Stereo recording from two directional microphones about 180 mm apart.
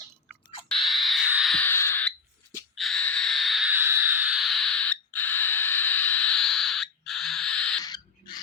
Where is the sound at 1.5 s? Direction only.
10° left (ahead or behind).